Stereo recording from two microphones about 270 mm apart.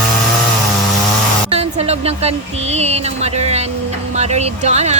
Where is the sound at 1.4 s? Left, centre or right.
Right.